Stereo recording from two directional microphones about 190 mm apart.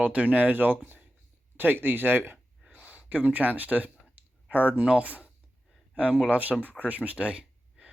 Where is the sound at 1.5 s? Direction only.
10° right (ahead or behind).